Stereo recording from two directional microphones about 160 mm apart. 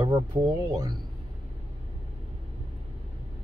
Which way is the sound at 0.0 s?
25° right (ahead or behind).